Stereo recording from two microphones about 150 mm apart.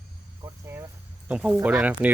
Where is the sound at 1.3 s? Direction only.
5° right (ahead or behind).